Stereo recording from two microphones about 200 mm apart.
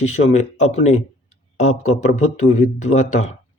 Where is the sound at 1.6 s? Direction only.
35° left (ahead or behind).